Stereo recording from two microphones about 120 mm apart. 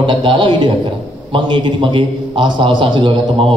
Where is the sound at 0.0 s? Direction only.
45° right (ahead or behind).